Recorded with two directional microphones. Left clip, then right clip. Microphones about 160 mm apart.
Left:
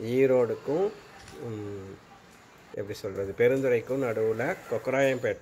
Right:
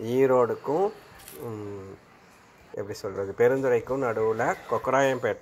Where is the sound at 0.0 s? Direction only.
20° left (ahead or behind).